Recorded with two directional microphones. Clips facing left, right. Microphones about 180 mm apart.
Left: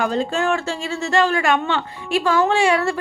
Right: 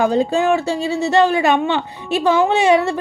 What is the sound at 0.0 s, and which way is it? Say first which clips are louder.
Speech: right 5 dB; 15° right (ahead or behind).